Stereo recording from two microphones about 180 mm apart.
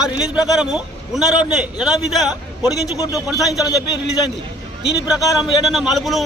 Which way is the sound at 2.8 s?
20° left (ahead or behind).